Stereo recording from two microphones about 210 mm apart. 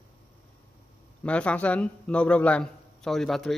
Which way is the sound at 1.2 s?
5° left (ahead or behind).